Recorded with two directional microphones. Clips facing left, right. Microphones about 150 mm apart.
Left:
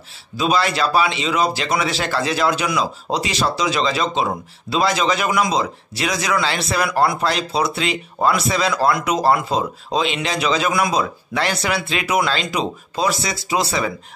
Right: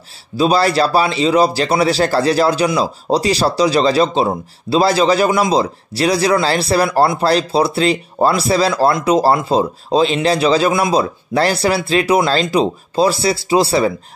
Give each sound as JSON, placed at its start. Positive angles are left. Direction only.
{"t": 0.4, "sound": "speech", "side_deg": -35}